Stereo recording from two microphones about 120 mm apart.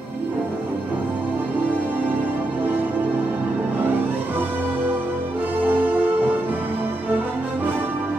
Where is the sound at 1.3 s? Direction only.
15° right (ahead or behind).